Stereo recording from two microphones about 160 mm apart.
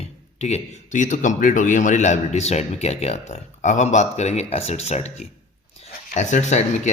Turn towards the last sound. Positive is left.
turn(degrees=45)  # may be behind; listen again after turning